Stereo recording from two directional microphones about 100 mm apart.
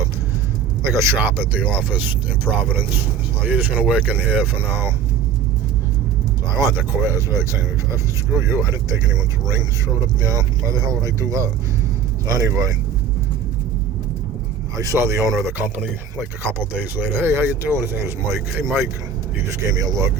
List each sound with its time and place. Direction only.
0.9 s speech: 25° right (ahead or behind)
6.7 s speech: 25° right (ahead or behind)
14.8 s speech: 30° right (ahead or behind)